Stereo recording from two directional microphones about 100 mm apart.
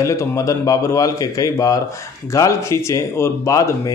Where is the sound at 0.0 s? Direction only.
30° left (ahead or behind).